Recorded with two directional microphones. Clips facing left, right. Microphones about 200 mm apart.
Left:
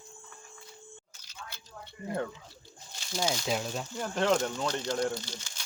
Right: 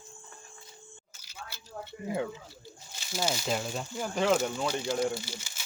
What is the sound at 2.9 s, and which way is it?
Speech, 5° right (ahead or behind).